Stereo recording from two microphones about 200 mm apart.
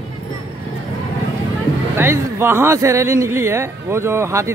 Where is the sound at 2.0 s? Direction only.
10° right (ahead or behind).